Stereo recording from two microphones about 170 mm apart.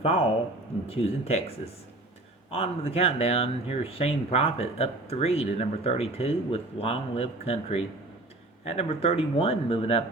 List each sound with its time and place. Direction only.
0.0 s speech: 35° left (ahead or behind)